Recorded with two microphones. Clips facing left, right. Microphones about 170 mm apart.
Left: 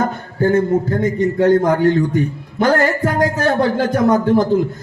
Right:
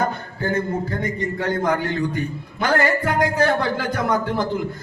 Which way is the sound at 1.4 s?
45° left (ahead or behind).